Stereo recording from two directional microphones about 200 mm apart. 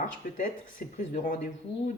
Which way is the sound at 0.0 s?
40° left (ahead or behind).